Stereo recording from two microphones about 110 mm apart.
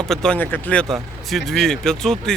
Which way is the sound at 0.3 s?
15° left (ahead or behind).